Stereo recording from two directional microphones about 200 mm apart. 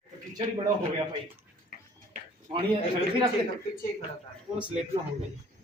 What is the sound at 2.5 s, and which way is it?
Speech, 35° right (ahead or behind).